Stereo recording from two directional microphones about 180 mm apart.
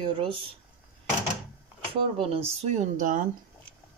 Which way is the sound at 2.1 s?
35° right (ahead or behind).